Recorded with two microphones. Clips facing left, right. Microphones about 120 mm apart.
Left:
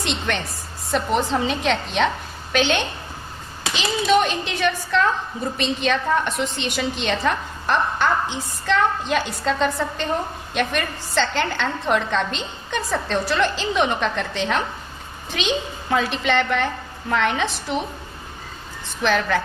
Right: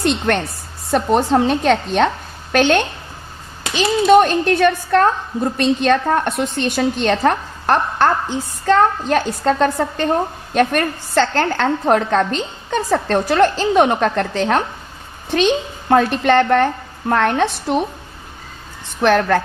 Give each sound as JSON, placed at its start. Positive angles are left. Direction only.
{"t": 0.9, "sound": "a woman's voice", "side_deg": -55}
{"t": 7.9, "sound": "a woman's voice", "side_deg": -45}
{"t": 15.9, "sound": "a woman's voice", "side_deg": -55}
{"t": 19.0, "sound": "a woman's voice", "side_deg": -60}